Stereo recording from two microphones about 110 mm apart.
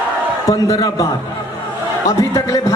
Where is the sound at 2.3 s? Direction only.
30° left (ahead or behind).